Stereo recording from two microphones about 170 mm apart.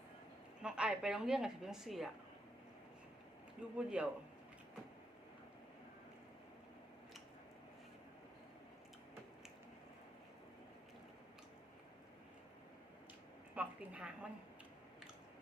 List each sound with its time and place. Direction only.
0.6 s a woman's voice: 5° right (ahead or behind)
3.8 s a man's voice: 5° right (ahead or behind)
13.6 s a woman's voice: 5° right (ahead or behind)